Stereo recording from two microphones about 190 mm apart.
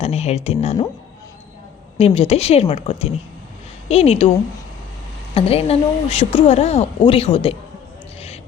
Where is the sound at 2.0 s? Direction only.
30° left (ahead or behind).